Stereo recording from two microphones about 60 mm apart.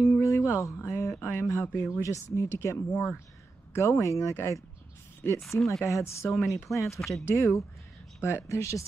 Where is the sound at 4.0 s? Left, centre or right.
Left.